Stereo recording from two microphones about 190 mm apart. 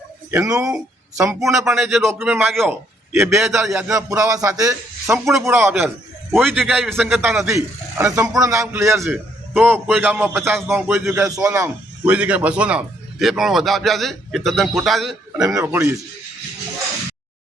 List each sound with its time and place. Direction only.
0.3 s a man's voice: 10° right (ahead or behind)
1.6 s a man's voice: centre (ahead or behind)
6.3 s a man's voice: centre (ahead or behind)
7.2 s a man's voice: 10° right (ahead or behind)
15.5 s a man's voice: 10° right (ahead or behind)